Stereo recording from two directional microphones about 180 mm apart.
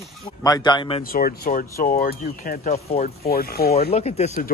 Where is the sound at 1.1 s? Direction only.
55° left (ahead or behind).